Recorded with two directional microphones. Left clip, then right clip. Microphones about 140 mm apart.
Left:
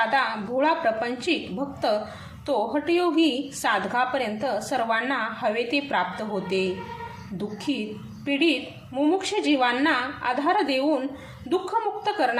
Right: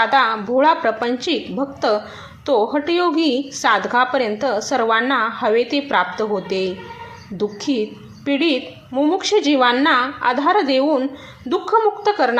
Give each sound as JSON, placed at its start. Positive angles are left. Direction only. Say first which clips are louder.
{"t": 0.0, "sound": "a woman's voice", "louder": "right 8 dB", "side_deg": -25}